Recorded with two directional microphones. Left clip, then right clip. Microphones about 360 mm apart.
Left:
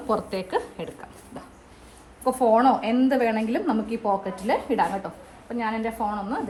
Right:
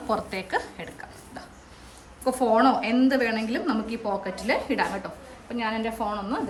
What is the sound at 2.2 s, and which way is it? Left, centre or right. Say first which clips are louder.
Speech: left 2 dB; centre.